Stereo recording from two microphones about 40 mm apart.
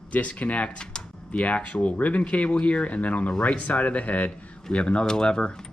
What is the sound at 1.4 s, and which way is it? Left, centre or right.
Speech, left.